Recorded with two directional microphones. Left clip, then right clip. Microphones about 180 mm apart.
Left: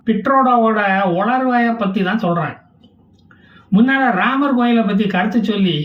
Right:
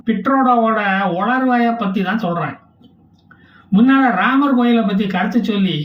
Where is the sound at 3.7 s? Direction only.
Centre (ahead or behind).